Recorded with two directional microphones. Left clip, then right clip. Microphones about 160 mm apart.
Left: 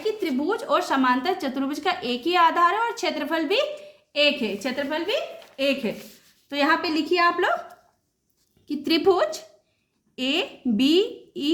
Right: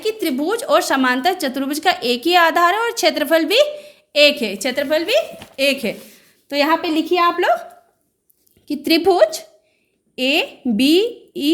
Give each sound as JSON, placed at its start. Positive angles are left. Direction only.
{"t": 0.0, "sound": "a woman's voice", "side_deg": -60}
{"t": 6.5, "sound": "speech", "side_deg": -35}
{"t": 8.6, "sound": "a woman's voice", "side_deg": -30}